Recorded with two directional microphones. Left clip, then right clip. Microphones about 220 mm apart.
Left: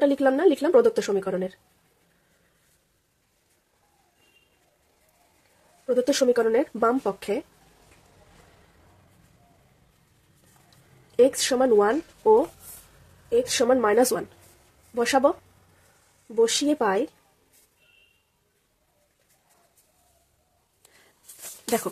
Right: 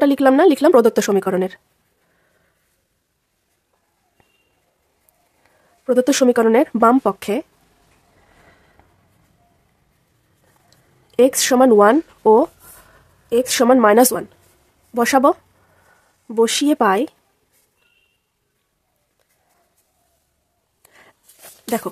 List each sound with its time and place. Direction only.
0.0 s speech: 35° right (ahead or behind)
5.9 s speech: 35° right (ahead or behind)
10.7 s speech: 35° right (ahead or behind)
16.3 s speech: 35° right (ahead or behind)
20.8 s a sound: 20° right (ahead or behind)